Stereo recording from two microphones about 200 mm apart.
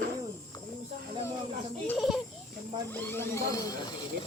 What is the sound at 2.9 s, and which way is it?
Speech, 10° left (ahead or behind).